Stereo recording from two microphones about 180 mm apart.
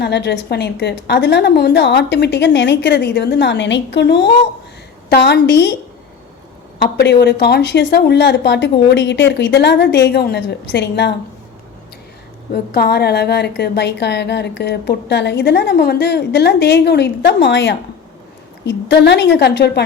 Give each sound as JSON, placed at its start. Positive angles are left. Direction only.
{"t": 0.0, "sound": "a woman's voice", "side_deg": 70}
{"t": 6.7, "sound": "a woman's voice", "side_deg": 65}
{"t": 12.7, "sound": "a woman's voice", "side_deg": 65}